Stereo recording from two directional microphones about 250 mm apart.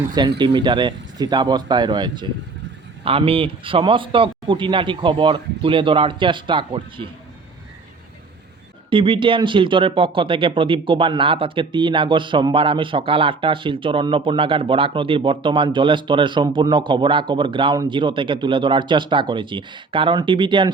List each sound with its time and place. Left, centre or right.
0.1 s speech: centre
8.9 s speech: centre